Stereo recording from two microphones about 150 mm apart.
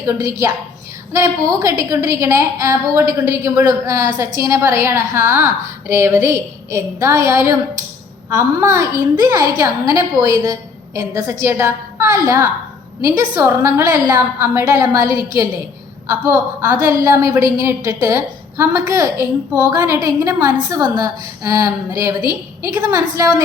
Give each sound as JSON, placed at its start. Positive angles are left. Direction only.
{"t": 0.0, "sound": "a woman's voice", "side_deg": -20}